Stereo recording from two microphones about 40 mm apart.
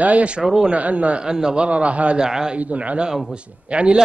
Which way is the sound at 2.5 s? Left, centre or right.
Right.